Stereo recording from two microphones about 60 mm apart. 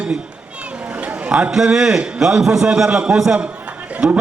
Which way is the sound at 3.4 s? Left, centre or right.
Centre.